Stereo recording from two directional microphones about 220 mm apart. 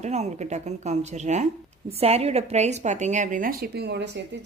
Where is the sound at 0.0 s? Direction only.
30° right (ahead or behind).